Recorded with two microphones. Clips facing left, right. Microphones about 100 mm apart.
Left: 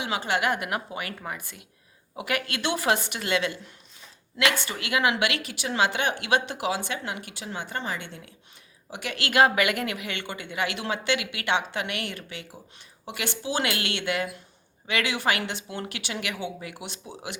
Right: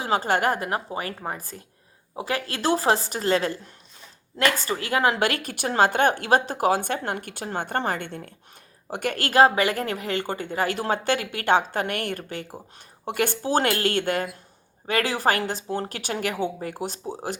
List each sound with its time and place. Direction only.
0.0 s a woman's voice: 40° right (ahead or behind)